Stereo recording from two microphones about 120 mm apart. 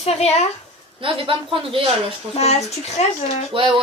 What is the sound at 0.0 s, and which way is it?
Speech, 60° left (ahead or behind).